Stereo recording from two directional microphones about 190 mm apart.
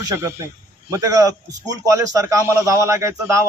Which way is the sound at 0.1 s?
15° right (ahead or behind).